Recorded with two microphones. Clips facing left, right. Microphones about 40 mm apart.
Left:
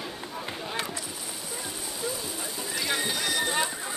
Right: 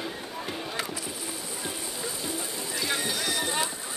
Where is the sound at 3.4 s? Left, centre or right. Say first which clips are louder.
Left 3 dB; centre.